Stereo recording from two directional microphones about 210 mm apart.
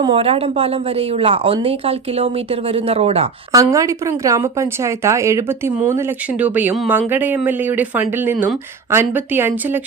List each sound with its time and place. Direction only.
0.0 s a woman's voice: 25° right (ahead or behind)
3.5 s a woman's voice: 15° right (ahead or behind)